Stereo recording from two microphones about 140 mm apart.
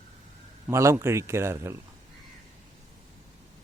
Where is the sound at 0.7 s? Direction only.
20° right (ahead or behind).